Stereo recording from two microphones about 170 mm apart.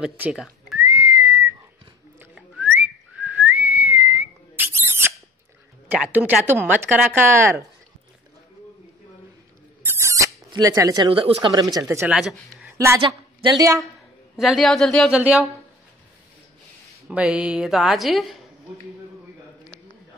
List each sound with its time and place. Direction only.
0.0 s speech: 5° right (ahead or behind)
0.7 s whistling: 15° right (ahead or behind)
2.3 s whistling: 5° right (ahead or behind)
5.9 s speech: 5° right (ahead or behind)
9.9 s a sound: 15° right (ahead or behind)
10.5 s speech: 20° right (ahead or behind)
11.1 s a woman's voice: 35° right (ahead or behind)
11.7 s speech: 20° right (ahead or behind)
12.1 s speech: centre (ahead or behind)
12.7 s a woman's voice: 15° right (ahead or behind)
13.0 s a woman's voice: 25° right (ahead or behind)
14.3 s a woman's voice: centre (ahead or behind)
17.1 s a woman's voice: 5° right (ahead or behind)